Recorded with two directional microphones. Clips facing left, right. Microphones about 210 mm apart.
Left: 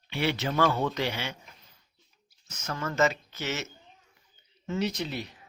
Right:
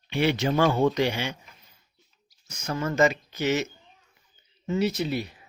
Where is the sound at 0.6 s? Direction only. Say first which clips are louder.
Right 4 dB; 25° right (ahead or behind).